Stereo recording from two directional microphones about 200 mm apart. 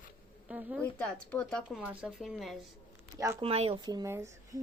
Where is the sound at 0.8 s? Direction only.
5° left (ahead or behind).